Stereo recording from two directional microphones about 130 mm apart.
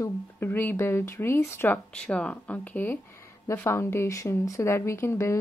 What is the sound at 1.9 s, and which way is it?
A woman's voice, 10° left (ahead or behind).